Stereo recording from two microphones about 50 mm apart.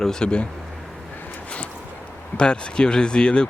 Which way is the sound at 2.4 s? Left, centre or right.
Centre.